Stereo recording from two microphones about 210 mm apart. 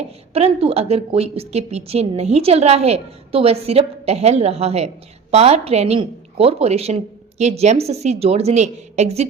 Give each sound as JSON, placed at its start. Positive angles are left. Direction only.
{"t": 0.3, "sound": "a woman's voice", "side_deg": -30}